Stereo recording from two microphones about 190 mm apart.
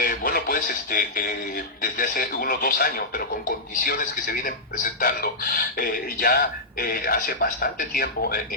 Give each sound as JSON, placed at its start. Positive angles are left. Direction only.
{"t": 0.0, "sound": "music", "side_deg": 45}
{"t": 1.8, "sound": "speech", "side_deg": 50}